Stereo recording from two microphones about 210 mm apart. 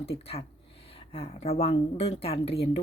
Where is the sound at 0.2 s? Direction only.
30° left (ahead or behind).